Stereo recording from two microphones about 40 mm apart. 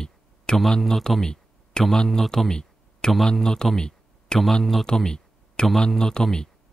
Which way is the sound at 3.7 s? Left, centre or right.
Centre.